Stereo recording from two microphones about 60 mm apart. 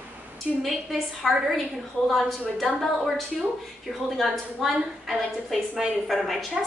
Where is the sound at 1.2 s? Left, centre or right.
Centre.